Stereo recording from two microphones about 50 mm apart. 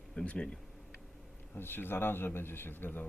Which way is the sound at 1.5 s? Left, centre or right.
Left.